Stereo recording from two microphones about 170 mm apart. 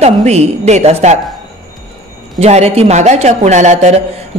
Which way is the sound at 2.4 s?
40° right (ahead or behind).